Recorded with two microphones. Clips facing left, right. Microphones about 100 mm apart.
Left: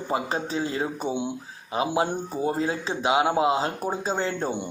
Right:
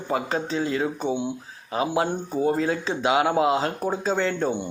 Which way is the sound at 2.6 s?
30° left (ahead or behind).